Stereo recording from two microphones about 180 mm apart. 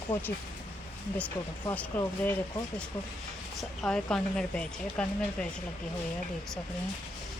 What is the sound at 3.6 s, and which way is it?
A woman's voice, 5° left (ahead or behind).